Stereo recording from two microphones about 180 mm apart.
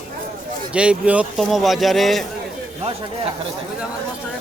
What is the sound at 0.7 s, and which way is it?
Speech, 5° right (ahead or behind).